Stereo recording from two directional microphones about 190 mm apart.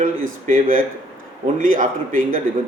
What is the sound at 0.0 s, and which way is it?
Speech, 45° right (ahead or behind).